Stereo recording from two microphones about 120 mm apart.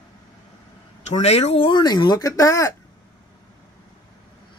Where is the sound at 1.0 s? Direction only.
65° left (ahead or behind).